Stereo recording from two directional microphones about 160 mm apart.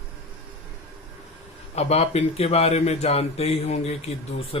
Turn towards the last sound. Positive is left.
turn(degrees=40)  # may be behind; listen again after turning